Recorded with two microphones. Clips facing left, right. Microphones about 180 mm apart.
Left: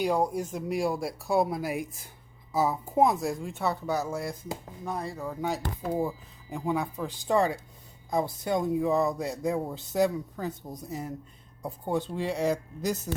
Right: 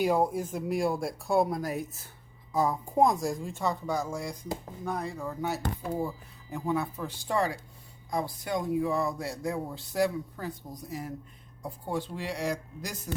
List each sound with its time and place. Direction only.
0.0 s speech: 5° right (ahead or behind); by 13.2 s 20° left (ahead or behind)